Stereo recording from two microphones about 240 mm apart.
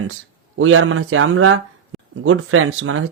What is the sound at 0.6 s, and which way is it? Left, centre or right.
Speech, right.